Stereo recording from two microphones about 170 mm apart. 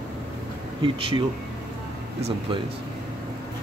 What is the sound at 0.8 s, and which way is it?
Speech, 30° right (ahead or behind).